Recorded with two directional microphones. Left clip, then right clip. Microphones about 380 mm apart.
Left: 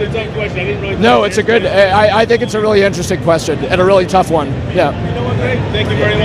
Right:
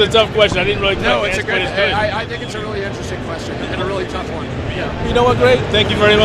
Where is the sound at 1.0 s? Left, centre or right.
Left.